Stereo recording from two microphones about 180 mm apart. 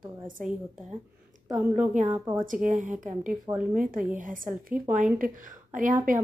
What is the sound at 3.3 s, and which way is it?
Speech, 10° right (ahead or behind).